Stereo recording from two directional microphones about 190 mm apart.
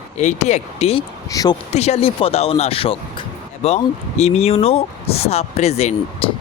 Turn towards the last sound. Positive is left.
turn(degrees=35)  # may be behind; listen again after turning